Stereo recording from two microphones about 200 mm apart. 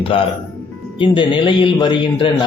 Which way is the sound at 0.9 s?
25° left (ahead or behind).